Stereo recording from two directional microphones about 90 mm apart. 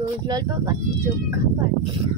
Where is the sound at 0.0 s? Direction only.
45° right (ahead or behind).